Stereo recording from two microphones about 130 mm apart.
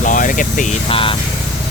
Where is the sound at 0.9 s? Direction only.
45° left (ahead or behind).